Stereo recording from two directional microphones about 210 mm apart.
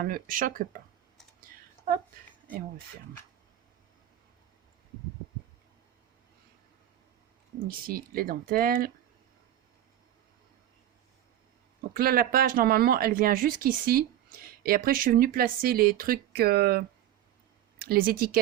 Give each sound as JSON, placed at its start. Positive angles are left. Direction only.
{"t": 0.0, "sound": "speech", "side_deg": -40}
{"t": 7.7, "sound": "speech", "side_deg": -45}
{"t": 11.9, "sound": "speech", "side_deg": -45}